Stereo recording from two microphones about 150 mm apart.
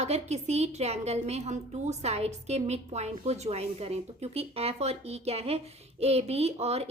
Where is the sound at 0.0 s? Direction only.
45° right (ahead or behind).